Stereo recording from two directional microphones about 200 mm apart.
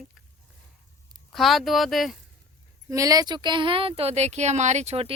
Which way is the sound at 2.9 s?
15° right (ahead or behind).